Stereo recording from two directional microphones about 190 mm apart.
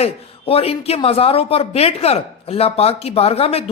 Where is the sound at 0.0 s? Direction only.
30° left (ahead or behind).